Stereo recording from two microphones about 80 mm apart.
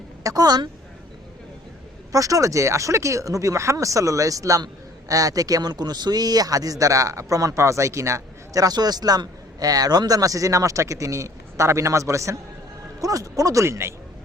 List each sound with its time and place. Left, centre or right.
0.2 s a woman's voice: right
2.1 s speech: right